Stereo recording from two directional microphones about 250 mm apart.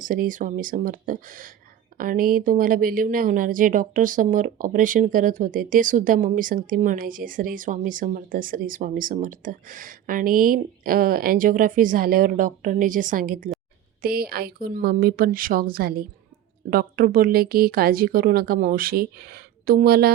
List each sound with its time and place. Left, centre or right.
0.0 s speech: right